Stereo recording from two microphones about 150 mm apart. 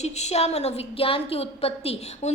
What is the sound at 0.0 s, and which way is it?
A woman's voice, 50° left (ahead or behind).